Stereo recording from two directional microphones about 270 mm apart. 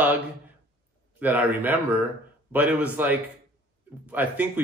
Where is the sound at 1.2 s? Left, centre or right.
Centre.